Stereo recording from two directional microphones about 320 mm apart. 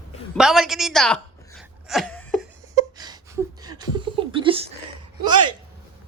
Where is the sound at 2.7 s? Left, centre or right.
Centre.